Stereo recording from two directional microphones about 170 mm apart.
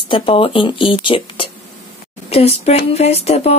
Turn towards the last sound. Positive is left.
turn(degrees=35)  # may be behind; listen again after turning